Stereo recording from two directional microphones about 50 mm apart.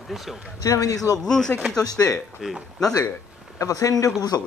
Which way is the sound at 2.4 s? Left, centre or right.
Centre.